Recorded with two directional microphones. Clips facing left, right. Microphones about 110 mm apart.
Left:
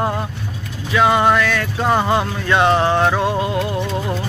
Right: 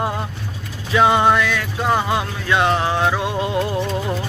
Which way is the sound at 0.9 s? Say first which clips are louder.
Even; 20° right (ahead or behind).